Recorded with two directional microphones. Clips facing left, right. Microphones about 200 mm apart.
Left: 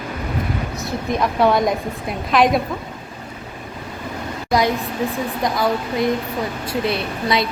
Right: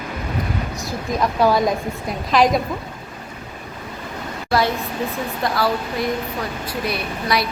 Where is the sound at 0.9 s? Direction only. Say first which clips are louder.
Left 1 dB; centre (ahead or behind).